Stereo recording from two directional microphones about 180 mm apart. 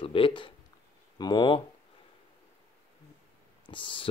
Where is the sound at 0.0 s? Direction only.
30° left (ahead or behind).